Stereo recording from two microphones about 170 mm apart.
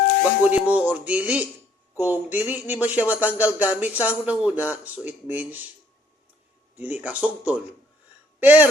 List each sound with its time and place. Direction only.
0.6 s speech: 10° right (ahead or behind)
6.7 s speech: 10° right (ahead or behind)